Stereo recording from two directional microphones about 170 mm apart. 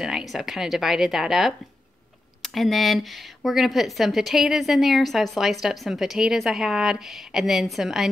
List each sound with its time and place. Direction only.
0.0 s speech: centre (ahead or behind)